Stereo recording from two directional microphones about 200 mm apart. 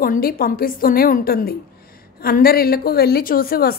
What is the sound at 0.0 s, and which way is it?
A woman's voice, 45° left (ahead or behind).